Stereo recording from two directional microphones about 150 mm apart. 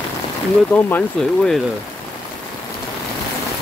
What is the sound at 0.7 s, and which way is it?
Speech, 10° left (ahead or behind).